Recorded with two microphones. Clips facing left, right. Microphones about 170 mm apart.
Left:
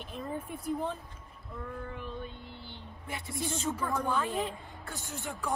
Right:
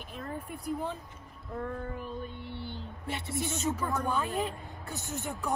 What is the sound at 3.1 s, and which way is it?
Speech, 25° right (ahead or behind).